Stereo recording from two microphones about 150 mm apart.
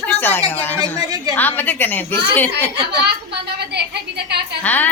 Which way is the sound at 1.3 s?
10° left (ahead or behind).